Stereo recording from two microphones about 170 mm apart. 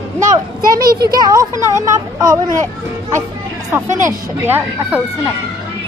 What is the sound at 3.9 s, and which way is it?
Speech, 10° right (ahead or behind).